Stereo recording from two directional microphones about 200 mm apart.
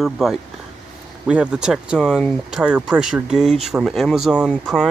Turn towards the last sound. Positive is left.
turn(degrees=-5)  # may be behind; listen again after turning